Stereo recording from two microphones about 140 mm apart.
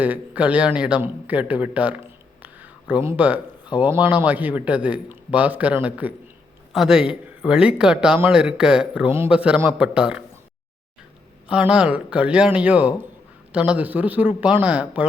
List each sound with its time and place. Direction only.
0.0 s a man's voice: 10° right (ahead or behind)
2.4 s a sound: 10° right (ahead or behind)
3.8 s a man's voice: 15° right (ahead or behind)
9.0 s a man's voice: 20° right (ahead or behind)
9.3 s a man's voice: 5° right (ahead or behind)
11.4 s a man's voice: 5° right (ahead or behind)